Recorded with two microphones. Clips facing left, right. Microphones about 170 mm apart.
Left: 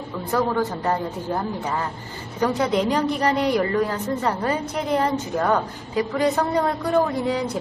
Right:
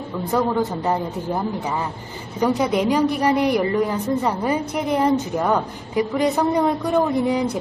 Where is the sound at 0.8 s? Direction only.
10° right (ahead or behind).